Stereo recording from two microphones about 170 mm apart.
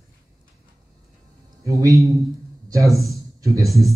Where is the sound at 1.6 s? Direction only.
20° right (ahead or behind).